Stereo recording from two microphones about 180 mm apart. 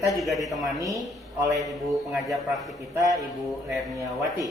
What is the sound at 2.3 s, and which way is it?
Speech, centre (ahead or behind).